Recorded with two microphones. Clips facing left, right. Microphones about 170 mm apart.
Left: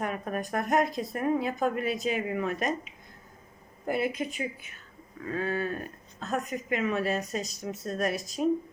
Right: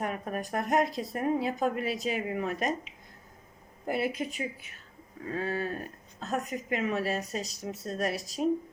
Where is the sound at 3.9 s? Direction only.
35° right (ahead or behind).